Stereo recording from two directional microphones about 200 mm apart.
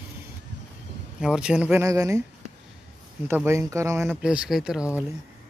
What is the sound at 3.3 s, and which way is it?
Speech, 10° right (ahead or behind).